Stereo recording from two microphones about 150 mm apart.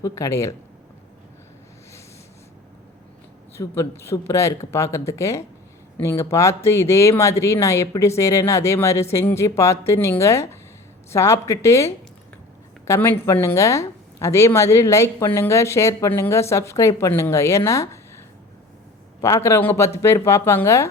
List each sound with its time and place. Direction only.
0.0 s a woman's voice: 20° left (ahead or behind)
3.5 s a woman's voice: 20° left (ahead or behind)
12.9 s a woman's voice: 15° left (ahead or behind)
19.2 s a woman's voice: 20° left (ahead or behind)